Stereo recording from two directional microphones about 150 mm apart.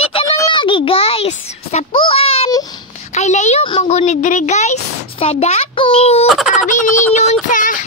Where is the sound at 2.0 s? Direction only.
40° left (ahead or behind).